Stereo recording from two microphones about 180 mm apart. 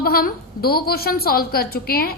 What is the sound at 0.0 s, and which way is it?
A woman's voice, 55° left (ahead or behind).